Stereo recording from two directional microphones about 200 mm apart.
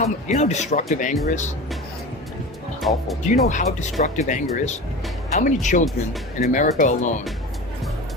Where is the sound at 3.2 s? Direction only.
35° left (ahead or behind).